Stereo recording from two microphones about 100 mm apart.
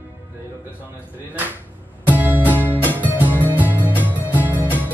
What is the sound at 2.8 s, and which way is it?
Music, 20° left (ahead or behind).